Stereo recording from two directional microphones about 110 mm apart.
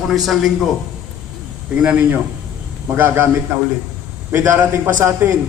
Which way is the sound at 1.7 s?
10° right (ahead or behind).